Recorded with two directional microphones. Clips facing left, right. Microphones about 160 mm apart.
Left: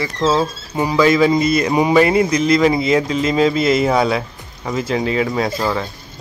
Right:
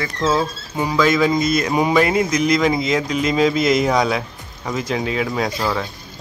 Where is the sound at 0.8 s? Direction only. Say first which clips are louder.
Left 3 dB; 5° left (ahead or behind).